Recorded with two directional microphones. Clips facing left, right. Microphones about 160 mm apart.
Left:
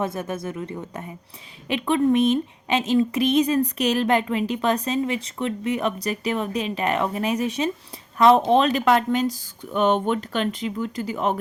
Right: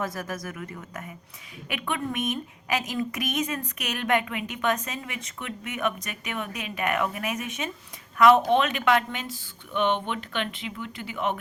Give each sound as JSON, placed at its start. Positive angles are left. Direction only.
{"t": 0.0, "sound": "a woman's voice", "side_deg": 25}